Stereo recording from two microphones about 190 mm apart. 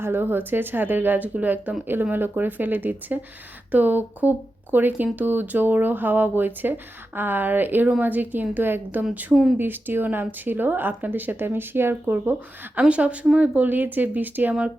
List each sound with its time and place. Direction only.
0.0 s a woman's voice: 10° right (ahead or behind)